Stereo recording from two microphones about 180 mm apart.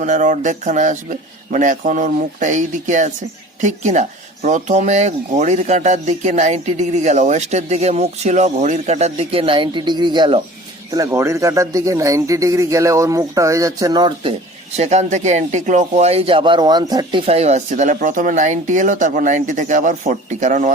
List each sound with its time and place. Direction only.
0.0 s speech: 45° right (ahead or behind); by 10.4 s 30° right (ahead or behind)
10.9 s speech: 15° right (ahead or behind)
14.8 s speech: 40° right (ahead or behind)